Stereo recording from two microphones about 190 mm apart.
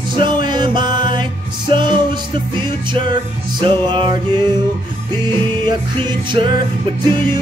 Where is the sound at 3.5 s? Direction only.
25° right (ahead or behind).